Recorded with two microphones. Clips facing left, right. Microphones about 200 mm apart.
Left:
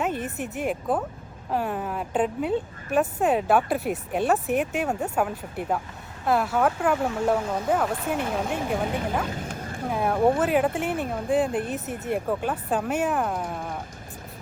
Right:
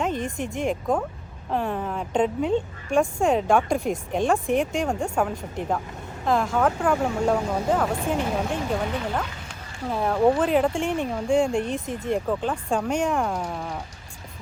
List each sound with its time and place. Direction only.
0.0 s a woman's voice: 5° left (ahead or behind)
9.3 s a sound: 50° left (ahead or behind)
9.9 s a woman's voice: 10° left (ahead or behind)